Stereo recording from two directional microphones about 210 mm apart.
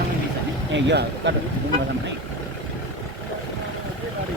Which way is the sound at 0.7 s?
55° right (ahead or behind).